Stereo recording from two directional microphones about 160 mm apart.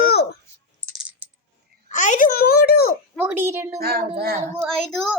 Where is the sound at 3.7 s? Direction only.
75° right (ahead or behind).